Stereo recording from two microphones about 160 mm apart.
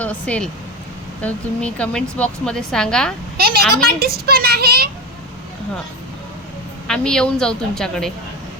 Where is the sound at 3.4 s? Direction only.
75° right (ahead or behind).